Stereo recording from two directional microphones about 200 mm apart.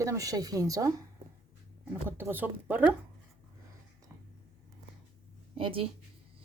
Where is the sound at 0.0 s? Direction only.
15° right (ahead or behind).